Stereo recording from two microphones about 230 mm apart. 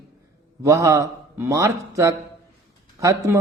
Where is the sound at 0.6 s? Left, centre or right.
Centre.